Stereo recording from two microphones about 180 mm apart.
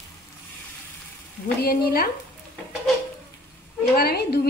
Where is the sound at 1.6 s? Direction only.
55° left (ahead or behind).